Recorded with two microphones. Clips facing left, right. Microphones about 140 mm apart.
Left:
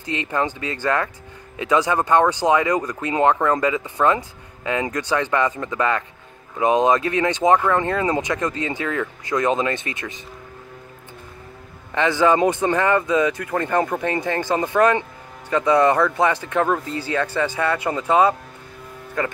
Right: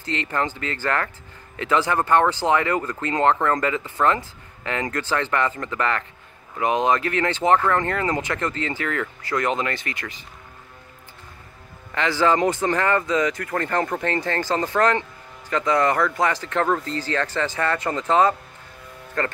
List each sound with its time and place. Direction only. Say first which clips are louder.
0.0 s speech: left 2 dB; 15° left (ahead or behind)
11.9 s speech: left 3 dB; 20° left (ahead or behind)